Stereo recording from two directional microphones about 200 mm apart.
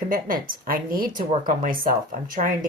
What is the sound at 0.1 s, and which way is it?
Speech, 45° right (ahead or behind).